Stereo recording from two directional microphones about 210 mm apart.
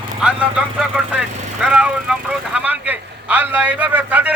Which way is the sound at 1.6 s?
5° right (ahead or behind).